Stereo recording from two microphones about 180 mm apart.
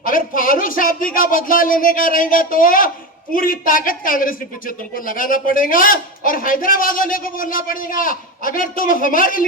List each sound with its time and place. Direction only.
0.0 s a man's voice: 50° left (ahead or behind)